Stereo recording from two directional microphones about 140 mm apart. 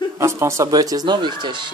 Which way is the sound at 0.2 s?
20° right (ahead or behind).